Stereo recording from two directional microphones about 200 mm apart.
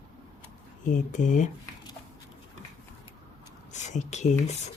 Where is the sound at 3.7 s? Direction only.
35° left (ahead or behind).